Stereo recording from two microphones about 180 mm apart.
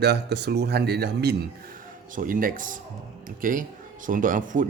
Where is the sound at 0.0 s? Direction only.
65° right (ahead or behind).